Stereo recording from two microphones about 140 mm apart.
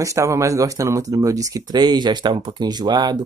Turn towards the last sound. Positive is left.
turn(degrees=-30)  # may be behind; listen again after turning